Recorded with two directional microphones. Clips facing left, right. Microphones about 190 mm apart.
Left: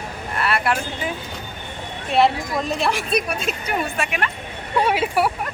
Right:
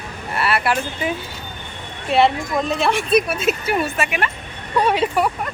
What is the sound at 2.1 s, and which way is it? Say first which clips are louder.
A woman's voice: right 2 dB; centre (ahead or behind).